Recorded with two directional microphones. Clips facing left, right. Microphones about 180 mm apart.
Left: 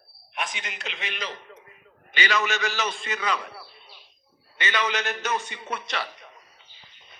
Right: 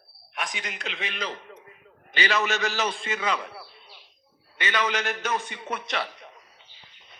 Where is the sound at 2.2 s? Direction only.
35° right (ahead or behind).